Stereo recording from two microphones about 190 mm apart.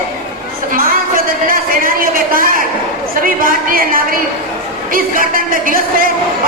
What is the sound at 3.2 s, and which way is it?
Speech, 50° right (ahead or behind).